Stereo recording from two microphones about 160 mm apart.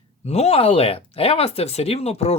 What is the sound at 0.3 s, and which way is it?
Speech, 40° left (ahead or behind).